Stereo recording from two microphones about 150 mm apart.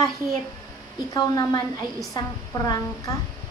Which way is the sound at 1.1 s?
25° left (ahead or behind).